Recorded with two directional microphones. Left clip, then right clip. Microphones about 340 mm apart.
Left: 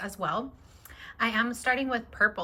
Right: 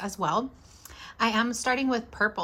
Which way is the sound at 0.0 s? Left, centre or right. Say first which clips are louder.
Right 3 dB; centre.